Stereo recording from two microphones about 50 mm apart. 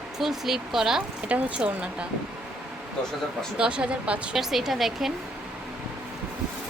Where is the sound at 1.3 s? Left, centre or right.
Right.